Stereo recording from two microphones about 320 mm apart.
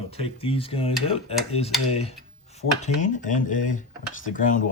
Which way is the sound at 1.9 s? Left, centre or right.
Centre.